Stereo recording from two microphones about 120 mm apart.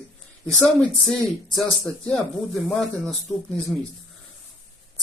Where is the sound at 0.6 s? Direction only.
Centre (ahead or behind).